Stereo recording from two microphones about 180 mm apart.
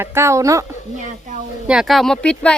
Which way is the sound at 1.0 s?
45° right (ahead or behind).